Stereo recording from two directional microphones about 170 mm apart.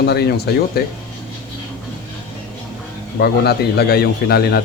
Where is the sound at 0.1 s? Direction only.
70° left (ahead or behind).